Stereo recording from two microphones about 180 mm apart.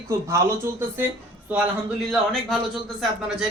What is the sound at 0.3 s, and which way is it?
A man's voice, 15° right (ahead or behind).